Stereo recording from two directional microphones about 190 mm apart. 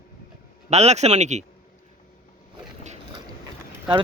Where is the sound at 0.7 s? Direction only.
35° right (ahead or behind).